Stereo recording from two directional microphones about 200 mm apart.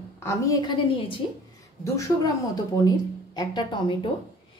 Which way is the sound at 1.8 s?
15° left (ahead or behind).